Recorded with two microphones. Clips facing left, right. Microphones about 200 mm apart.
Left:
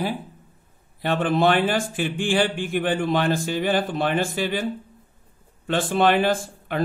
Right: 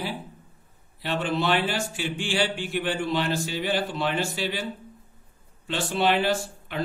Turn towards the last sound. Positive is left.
turn(degrees=50)  # may be behind; listen again after turning